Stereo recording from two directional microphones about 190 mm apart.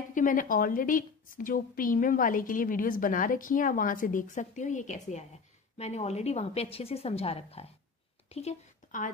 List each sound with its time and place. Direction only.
0.1 s a woman's voice: 45° left (ahead or behind)